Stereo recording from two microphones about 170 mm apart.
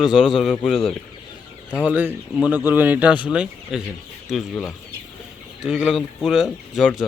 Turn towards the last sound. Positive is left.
turn(degrees=0)  # may be behind; listen again after turning